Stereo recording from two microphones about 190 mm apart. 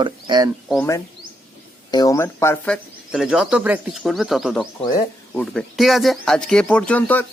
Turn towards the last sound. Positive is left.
turn(degrees=10)  # may be behind; listen again after turning